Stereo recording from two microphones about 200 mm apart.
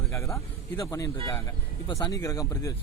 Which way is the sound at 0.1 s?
15° left (ahead or behind).